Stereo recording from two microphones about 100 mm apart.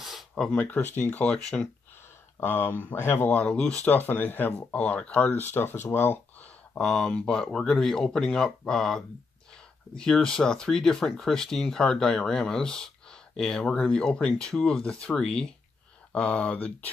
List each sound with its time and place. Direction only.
0.0 s speech: centre (ahead or behind)
2.4 s speech: 20° left (ahead or behind)
6.8 s speech: 5° left (ahead or behind)